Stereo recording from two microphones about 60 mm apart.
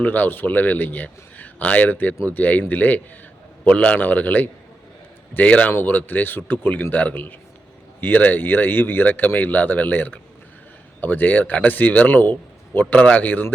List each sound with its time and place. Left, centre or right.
0.0 s a man's voice: left